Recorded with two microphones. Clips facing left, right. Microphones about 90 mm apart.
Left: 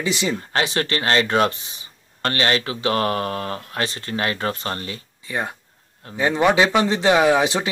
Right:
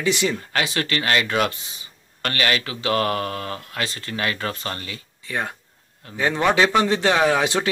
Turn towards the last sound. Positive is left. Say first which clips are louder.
# left 2 dB
turn(degrees=10)  # may be behind; listen again after turning